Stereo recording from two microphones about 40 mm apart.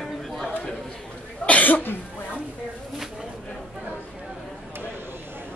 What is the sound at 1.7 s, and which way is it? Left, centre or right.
Speech, left.